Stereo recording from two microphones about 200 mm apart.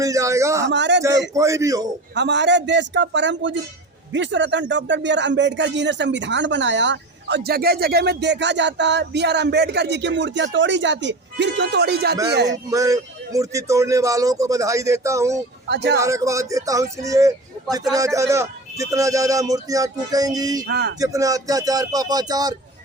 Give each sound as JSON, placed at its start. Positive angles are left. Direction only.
{"t": 0.0, "sound": "a man's voice", "side_deg": -15}
{"t": 0.7, "sound": "speech", "side_deg": -60}
{"t": 1.3, "sound": "speech", "side_deg": -15}
{"t": 2.1, "sound": "speech", "side_deg": -60}
{"t": 12.7, "sound": "speech", "side_deg": -15}
{"t": 15.7, "sound": "speech", "side_deg": -55}
{"t": 16.0, "sound": "speech", "side_deg": -15}
{"t": 20.7, "sound": "speech", "side_deg": -55}
{"t": 21.0, "sound": "speech", "side_deg": -15}